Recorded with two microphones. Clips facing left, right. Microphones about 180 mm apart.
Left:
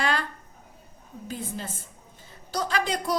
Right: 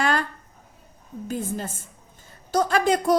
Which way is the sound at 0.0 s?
45° right (ahead or behind).